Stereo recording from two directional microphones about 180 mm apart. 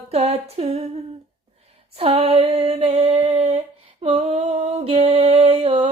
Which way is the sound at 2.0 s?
30° right (ahead or behind).